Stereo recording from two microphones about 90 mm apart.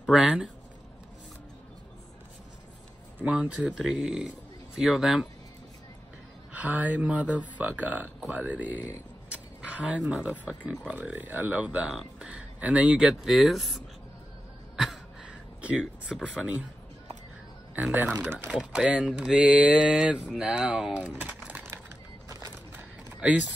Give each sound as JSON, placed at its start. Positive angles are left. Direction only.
{"t": 0.0, "sound": "speech", "side_deg": -5}
{"t": 3.3, "sound": "speech", "side_deg": -10}
{"t": 6.5, "sound": "speech", "side_deg": -15}
{"t": 11.9, "sound": "speech", "side_deg": 0}
{"t": 12.3, "sound": "speech", "side_deg": -15}
{"t": 15.2, "sound": "speech", "side_deg": -10}
{"t": 17.8, "sound": "speech", "side_deg": -20}
{"t": 18.5, "sound": "speech", "side_deg": -10}
{"t": 21.2, "sound": "crumpling", "side_deg": -20}